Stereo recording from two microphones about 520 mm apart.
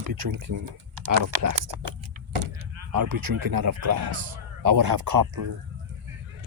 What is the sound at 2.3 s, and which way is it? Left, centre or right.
Vehicle, right.